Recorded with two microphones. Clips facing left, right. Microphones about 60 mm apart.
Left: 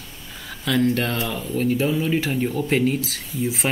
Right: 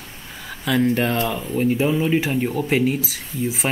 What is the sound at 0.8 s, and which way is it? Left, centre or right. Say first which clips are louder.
Speech: right 2 dB; centre.